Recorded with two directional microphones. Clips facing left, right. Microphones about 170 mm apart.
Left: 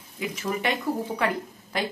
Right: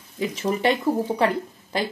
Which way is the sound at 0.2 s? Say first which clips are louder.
Right 6 dB; 30° right (ahead or behind).